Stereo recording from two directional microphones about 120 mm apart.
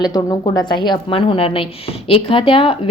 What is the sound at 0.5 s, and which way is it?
A woman's voice, 40° left (ahead or behind).